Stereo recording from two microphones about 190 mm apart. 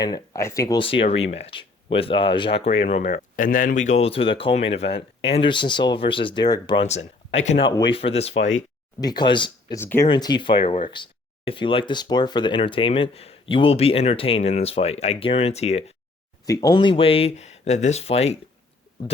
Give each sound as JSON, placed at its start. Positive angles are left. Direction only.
{"t": 0.0, "sound": "speech", "side_deg": 20}
{"t": 6.8, "sound": "speech", "side_deg": 35}
{"t": 9.0, "sound": "speech", "side_deg": 20}
{"t": 9.8, "sound": "speech", "side_deg": 10}
{"t": 10.1, "sound": "speech", "side_deg": 20}
{"t": 16.5, "sound": "speech", "side_deg": 20}